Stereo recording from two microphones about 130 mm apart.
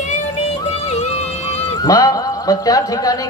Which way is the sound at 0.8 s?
55° left (ahead or behind).